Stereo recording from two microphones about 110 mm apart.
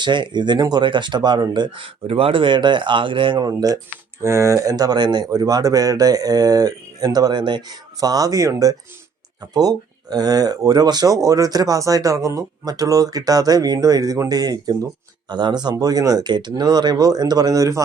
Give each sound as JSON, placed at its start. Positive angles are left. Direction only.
{"t": 0.0, "sound": "speech", "side_deg": -45}
{"t": 4.2, "sound": "speech", "side_deg": -25}